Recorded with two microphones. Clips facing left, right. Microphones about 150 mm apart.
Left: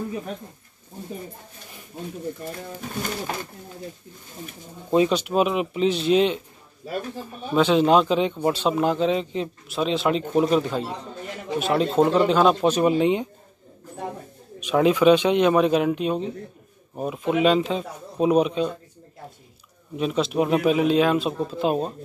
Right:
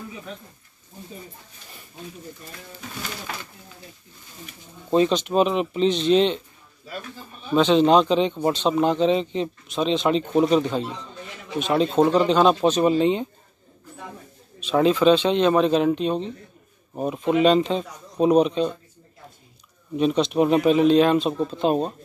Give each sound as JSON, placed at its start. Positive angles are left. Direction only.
{"t": 2.5, "sound": "speech", "side_deg": 45}
{"t": 4.9, "sound": "speech", "side_deg": 10}
{"t": 7.5, "sound": "speech", "side_deg": 10}
{"t": 14.6, "sound": "speech", "side_deg": 15}
{"t": 20.0, "sound": "speech", "side_deg": 5}